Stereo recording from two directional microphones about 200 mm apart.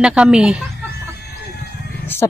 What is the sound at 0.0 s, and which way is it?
Speech, 5° right (ahead or behind).